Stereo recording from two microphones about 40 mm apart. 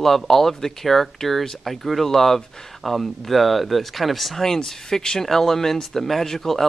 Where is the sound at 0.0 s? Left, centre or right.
Centre.